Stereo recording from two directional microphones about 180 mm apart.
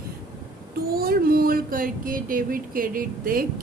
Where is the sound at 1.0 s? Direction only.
55° right (ahead or behind).